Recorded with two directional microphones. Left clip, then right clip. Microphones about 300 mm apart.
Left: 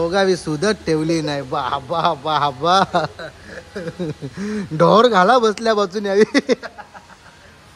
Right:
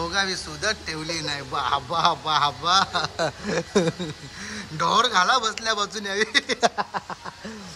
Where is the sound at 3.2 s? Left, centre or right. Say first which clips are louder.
Right 8 dB; centre.